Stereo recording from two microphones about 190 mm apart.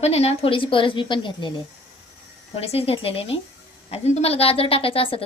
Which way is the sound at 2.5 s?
30° left (ahead or behind).